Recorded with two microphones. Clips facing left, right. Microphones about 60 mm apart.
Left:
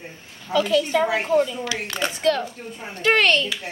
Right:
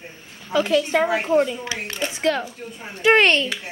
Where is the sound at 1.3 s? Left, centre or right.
Right.